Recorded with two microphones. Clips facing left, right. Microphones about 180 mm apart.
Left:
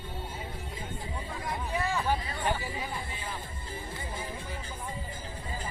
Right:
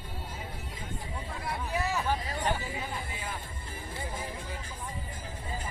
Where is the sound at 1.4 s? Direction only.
10° right (ahead or behind).